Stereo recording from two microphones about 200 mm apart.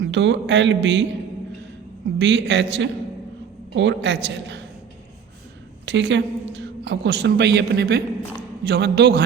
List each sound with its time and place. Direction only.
0.0 s a woman's voice: 60° right (ahead or behind)
2.1 s a woman's voice: 60° right (ahead or behind)
5.8 s a woman's voice: 60° right (ahead or behind)